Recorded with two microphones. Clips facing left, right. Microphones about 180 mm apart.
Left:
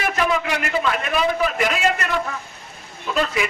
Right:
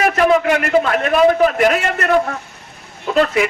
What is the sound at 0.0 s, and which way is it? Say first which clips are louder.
A man's voice: right 8 dB; 55° right (ahead or behind).